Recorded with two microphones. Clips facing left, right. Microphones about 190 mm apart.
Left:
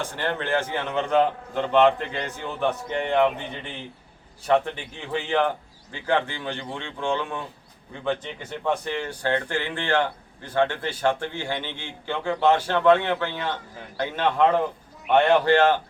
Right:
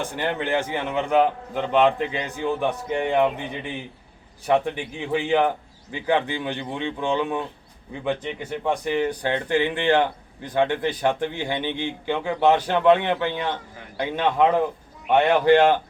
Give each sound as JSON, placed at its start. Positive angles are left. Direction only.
{"t": 0.0, "sound": "speech", "side_deg": -15}